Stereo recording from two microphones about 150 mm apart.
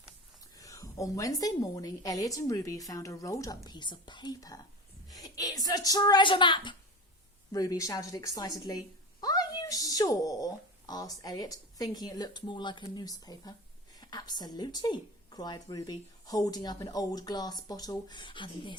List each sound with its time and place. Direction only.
0.5 s a woman's voice: 25° left (ahead or behind)